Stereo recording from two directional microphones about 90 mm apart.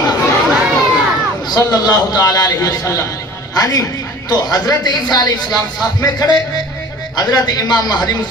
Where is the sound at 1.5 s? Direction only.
50° left (ahead or behind).